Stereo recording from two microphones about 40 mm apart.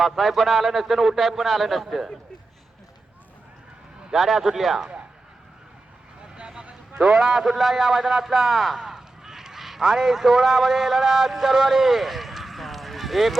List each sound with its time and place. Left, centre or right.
0.0 s a man's voice: centre
4.1 s a man's voice: centre
6.2 s a sound: right
7.0 s a man's voice: centre